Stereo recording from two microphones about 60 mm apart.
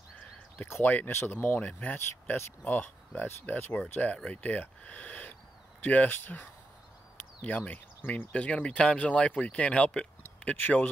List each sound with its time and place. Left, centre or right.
0.8 s speech: left
1.6 s speech: left
8.3 s speech: left